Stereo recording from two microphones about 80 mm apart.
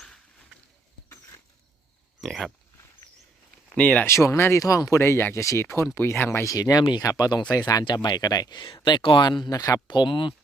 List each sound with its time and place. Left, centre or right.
2.2 s speech: centre
3.7 s speech: centre
4.0 s speech: left
4.6 s speech: left
4.9 s speech: left
6.0 s speech: left
6.4 s speech: left
7.9 s speech: left
8.5 s speech: left
9.5 s speech: left
9.9 s speech: left